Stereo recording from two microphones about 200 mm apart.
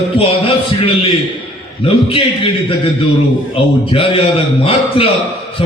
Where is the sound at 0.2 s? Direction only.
30° left (ahead or behind).